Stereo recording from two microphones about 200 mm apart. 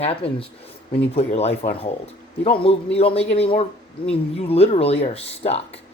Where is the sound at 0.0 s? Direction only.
30° left (ahead or behind).